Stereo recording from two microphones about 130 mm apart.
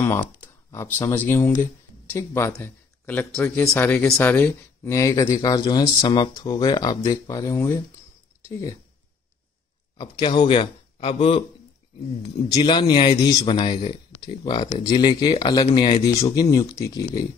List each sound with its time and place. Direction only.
0.0 s speech: 15° left (ahead or behind)
2.6 s a sound: 15° left (ahead or behind)
3.4 s speech: 20° left (ahead or behind)
9.9 s a man's voice: 35° left (ahead or behind)
12.6 s speech: 35° left (ahead or behind)